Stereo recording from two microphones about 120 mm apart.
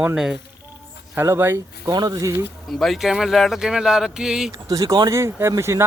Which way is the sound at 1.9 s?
35° right (ahead or behind).